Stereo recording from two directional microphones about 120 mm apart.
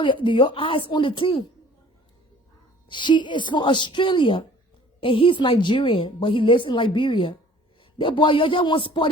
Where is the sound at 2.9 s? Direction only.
40° left (ahead or behind).